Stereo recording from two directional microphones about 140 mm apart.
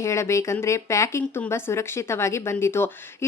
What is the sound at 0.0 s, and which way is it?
Speech, 20° left (ahead or behind).